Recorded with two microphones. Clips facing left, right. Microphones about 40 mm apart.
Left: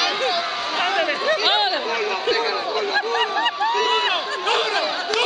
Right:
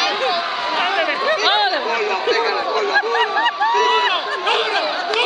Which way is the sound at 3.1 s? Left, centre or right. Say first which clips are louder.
Right 4 dB; centre.